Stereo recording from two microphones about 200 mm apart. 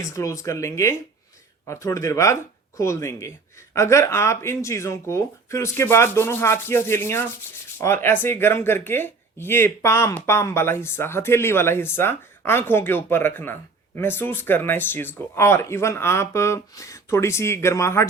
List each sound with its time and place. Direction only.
0.0 s speech: 15° left (ahead or behind)